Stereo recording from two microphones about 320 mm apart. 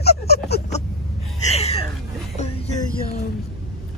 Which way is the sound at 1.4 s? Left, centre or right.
Centre.